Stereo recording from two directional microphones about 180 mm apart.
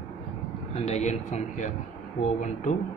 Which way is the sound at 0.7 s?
40° left (ahead or behind).